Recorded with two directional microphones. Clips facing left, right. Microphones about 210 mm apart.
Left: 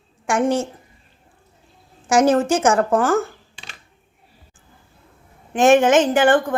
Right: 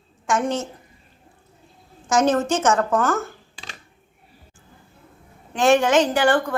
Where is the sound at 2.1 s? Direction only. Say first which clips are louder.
Left 3 dB; 10° left (ahead or behind).